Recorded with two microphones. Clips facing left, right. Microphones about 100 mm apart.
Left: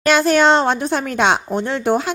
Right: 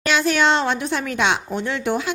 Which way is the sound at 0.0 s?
45° left (ahead or behind).